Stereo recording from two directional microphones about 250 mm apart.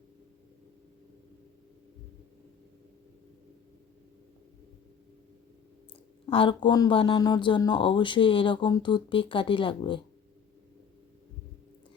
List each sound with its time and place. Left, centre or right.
6.3 s speech: centre